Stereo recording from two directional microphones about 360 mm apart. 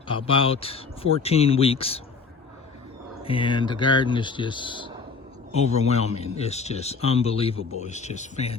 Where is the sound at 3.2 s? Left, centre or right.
Centre.